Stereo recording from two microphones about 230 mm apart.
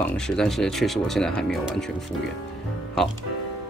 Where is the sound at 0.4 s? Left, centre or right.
Centre.